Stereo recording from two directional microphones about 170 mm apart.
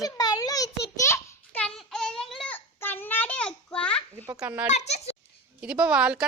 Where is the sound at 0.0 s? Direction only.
20° left (ahead or behind).